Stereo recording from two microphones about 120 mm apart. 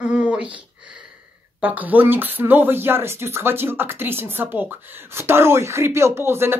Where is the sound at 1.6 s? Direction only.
15° right (ahead or behind).